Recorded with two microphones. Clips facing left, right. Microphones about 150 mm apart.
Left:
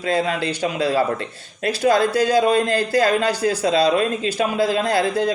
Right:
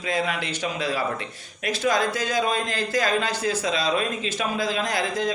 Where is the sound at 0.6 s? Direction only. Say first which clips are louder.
Left 7 dB; 30° left (ahead or behind).